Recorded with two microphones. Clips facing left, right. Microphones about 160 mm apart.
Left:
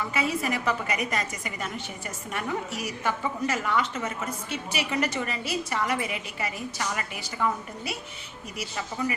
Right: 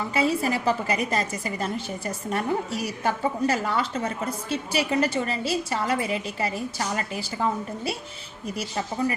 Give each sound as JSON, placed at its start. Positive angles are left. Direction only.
{"t": 0.1, "sound": "a woman's voice", "side_deg": -30}